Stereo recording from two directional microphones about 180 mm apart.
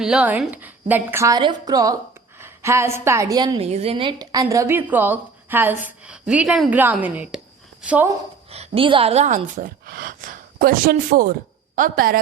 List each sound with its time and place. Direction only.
0.0 s a woman's voice: 5° right (ahead or behind); by 3.7 s 25° right (ahead or behind)
3.7 s a woman's voice: 35° right (ahead or behind); by 8.0 s 5° right (ahead or behind)
8.5 s a woman's voice: 30° right (ahead or behind); by 12.2 s 50° right (ahead or behind)